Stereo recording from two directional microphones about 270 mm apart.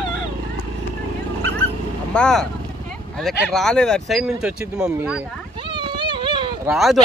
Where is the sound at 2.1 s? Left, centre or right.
Centre.